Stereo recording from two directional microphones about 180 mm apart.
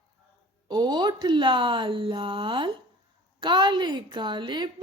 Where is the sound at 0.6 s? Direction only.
25° right (ahead or behind).